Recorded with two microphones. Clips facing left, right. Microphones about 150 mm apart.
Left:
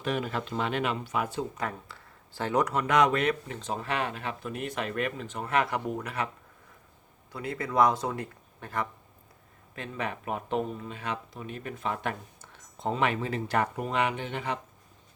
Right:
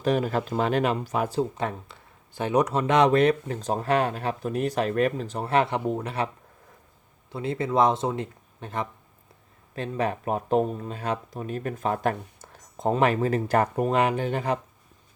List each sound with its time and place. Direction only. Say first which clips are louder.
0.0 s speech: right 7 dB; 40° right (ahead or behind); by 8.9 s 20° right (ahead or behind)
9.7 s speech: right 7 dB; 35° right (ahead or behind)